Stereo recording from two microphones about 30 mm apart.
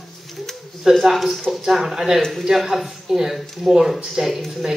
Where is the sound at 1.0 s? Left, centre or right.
Centre.